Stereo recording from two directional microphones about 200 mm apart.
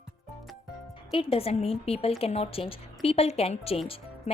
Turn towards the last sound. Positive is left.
turn(degrees=30)  # may be behind; listen again after turning